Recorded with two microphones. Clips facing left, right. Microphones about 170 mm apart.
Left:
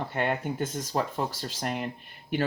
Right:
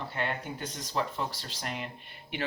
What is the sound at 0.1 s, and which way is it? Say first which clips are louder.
Speech: left 6 dB; 50° left (ahead or behind).